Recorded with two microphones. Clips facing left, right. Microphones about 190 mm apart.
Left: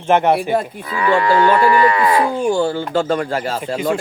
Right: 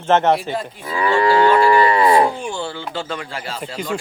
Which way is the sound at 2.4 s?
45° left (ahead or behind).